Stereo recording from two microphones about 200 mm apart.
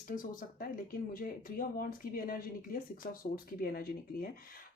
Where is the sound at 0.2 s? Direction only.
45° left (ahead or behind).